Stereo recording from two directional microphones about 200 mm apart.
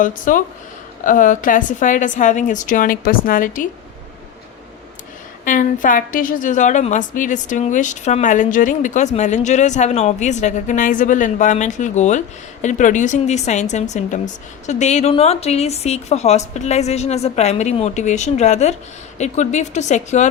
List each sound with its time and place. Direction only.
0.0 s a woman's voice: 40° left (ahead or behind)
5.5 s a woman's voice: 40° left (ahead or behind)